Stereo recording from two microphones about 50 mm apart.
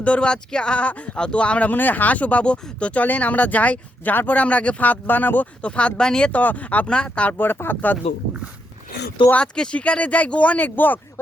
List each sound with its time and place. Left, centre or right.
0.0 s speech: left
1.7 s speech: left
5.6 s speech: left
6.3 s speech: left
7.3 s speech: left
9.3 s speech: centre
10.8 s speech: left